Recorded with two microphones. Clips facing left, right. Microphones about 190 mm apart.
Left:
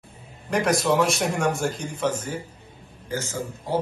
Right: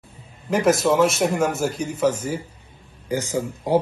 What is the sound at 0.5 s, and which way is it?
A man's voice, 5° right (ahead or behind).